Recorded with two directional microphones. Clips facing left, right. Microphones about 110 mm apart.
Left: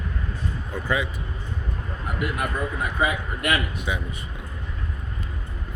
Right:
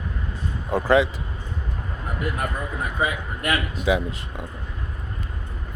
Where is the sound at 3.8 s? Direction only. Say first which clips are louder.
Right 7 dB; 90° right.